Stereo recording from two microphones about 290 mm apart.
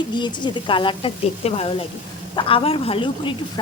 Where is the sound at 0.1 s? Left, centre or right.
Centre.